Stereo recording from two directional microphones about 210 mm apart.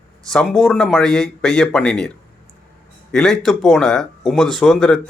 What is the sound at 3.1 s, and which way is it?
Speech, centre (ahead or behind).